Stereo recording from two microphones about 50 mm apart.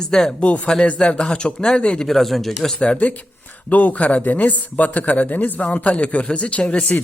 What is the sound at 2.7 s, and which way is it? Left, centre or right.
A man's voice, left.